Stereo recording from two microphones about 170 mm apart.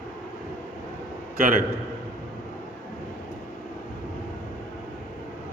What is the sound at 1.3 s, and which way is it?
Speech, 55° right (ahead or behind).